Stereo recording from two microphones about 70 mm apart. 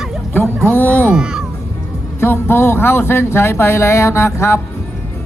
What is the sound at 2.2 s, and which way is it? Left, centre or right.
Speech, left.